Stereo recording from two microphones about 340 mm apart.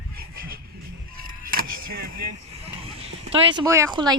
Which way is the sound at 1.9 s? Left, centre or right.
Right.